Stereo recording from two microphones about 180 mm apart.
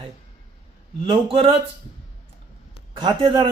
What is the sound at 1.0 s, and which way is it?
Speech, 30° right (ahead or behind).